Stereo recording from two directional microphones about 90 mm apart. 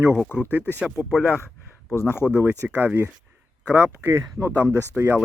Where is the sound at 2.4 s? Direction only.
20° right (ahead or behind).